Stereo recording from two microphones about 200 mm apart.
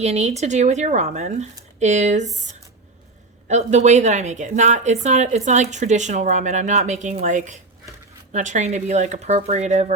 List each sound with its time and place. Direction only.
0.0 s a woman's voice: 35° right (ahead or behind)
3.5 s a woman's voice: 35° right (ahead or behind)